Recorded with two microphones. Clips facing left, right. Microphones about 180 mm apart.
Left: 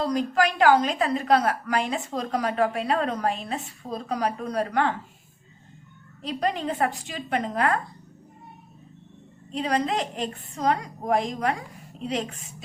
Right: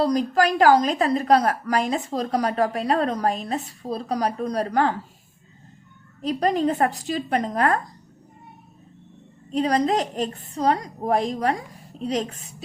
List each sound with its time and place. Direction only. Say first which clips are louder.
0.0 s a woman's voice: right 3 dB; 40° right (ahead or behind)
6.2 s a woman's voice: right 6 dB; 40° right (ahead or behind)
9.5 s a woman's voice: right 5 dB; 40° right (ahead or behind)